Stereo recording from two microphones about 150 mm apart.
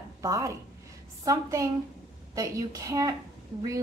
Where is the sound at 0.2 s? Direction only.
20° right (ahead or behind).